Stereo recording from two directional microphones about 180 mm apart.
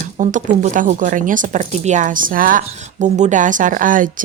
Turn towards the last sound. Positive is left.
turn(degrees=-50)  # may be behind; listen again after turning